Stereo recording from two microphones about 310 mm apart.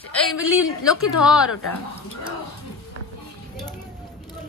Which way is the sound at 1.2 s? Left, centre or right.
Centre.